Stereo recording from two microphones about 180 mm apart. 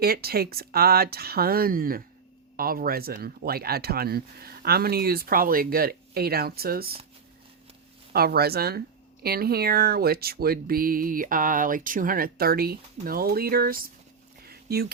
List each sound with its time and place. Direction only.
0.0 s speech: 60° right (ahead or behind)
8.1 s speech: 60° right (ahead or behind)
14.4 s a sound: 60° right (ahead or behind)